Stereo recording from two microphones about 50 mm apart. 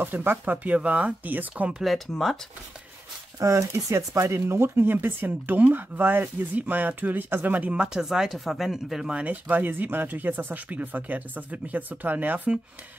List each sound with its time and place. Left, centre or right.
0.0 s speech: right
0.7 s speech: right
1.7 s speech: centre
3.3 s speech: right
7.9 s speech: centre
9.1 s speech: right